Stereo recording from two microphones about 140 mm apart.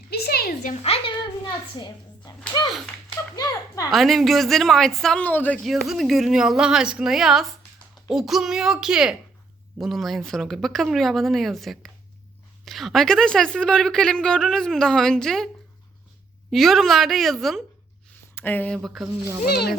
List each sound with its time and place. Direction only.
0.3 s a sound: 90° left
0.8 s a woman's voice: 45° left (ahead or behind); by 3.8 s 25° left (ahead or behind)
3.8 s a woman's voice: centre (ahead or behind)
5.6 s a woman's voice: centre (ahead or behind)
16.5 s a woman's voice: centre (ahead or behind)
18.3 s speech: 15° left (ahead or behind)
18.8 s a woman's voice: centre (ahead or behind)